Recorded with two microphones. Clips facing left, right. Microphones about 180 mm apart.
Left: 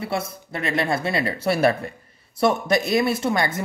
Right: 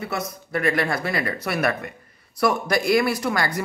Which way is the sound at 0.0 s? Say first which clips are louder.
Left 2 dB; 30° left (ahead or behind).